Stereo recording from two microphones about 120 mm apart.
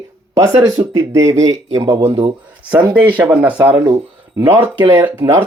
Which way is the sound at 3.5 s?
40° right (ahead or behind).